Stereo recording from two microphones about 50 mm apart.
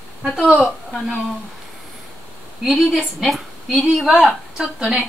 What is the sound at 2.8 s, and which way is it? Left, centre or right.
A woman's voice, centre.